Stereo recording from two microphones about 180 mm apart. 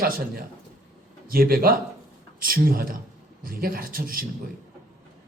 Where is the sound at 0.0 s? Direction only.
55° right (ahead or behind).